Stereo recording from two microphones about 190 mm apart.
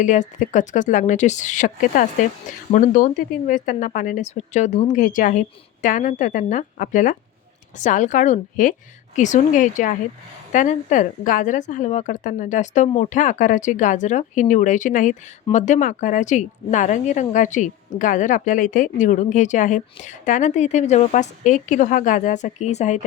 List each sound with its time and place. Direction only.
0.0 s a woman's voice: 40° left (ahead or behind)